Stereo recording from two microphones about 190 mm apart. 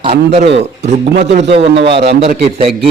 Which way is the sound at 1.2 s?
65° right (ahead or behind).